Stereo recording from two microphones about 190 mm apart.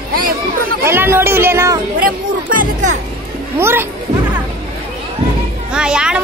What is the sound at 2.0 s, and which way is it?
Music, 45° right (ahead or behind).